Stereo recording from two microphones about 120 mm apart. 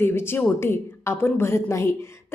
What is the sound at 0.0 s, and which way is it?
A woman's voice, 20° left (ahead or behind).